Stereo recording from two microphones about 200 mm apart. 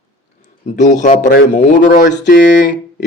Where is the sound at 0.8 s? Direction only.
35° left (ahead or behind).